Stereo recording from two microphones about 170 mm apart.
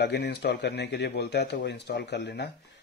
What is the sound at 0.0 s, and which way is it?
Speech, 90° left.